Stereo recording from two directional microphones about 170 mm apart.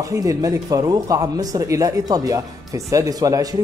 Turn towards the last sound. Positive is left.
turn(degrees=-20)  # may be behind; listen again after turning